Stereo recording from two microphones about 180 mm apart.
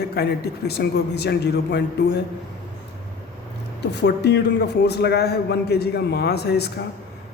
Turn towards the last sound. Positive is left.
turn(degrees=65)  # may be behind; listen again after turning